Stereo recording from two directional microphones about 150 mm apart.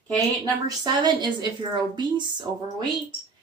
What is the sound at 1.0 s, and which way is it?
A woman's voice, 30° right (ahead or behind).